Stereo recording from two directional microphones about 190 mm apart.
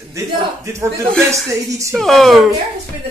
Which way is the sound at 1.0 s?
5° left (ahead or behind).